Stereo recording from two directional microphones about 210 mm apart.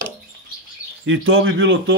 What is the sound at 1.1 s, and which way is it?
Speech, 70° right (ahead or behind).